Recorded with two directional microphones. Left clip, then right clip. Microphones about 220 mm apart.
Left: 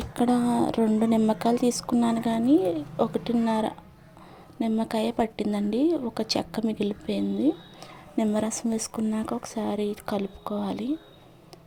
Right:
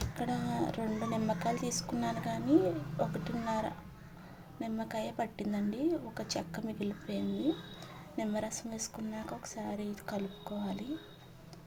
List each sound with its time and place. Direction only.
0.2 s speech: 40° left (ahead or behind)